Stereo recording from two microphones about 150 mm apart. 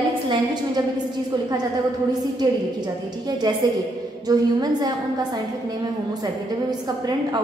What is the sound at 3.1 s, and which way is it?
A woman's voice, 30° right (ahead or behind).